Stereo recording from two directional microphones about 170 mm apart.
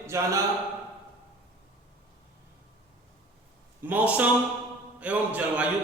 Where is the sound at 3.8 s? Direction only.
10° right (ahead or behind).